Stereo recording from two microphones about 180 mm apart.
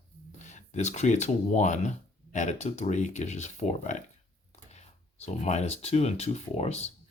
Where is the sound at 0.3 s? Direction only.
40° left (ahead or behind).